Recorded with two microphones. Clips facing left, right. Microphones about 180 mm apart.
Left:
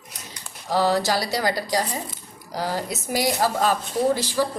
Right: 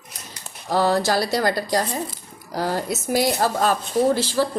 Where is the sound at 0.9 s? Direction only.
50° right (ahead or behind).